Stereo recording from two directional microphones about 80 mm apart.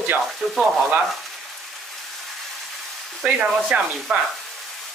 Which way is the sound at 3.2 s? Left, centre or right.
Centre.